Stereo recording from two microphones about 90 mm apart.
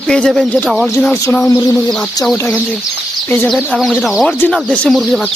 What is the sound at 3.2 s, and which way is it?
Speech, 25° left (ahead or behind).